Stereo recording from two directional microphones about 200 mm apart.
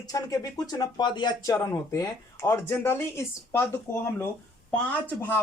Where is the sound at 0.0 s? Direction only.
15° left (ahead or behind).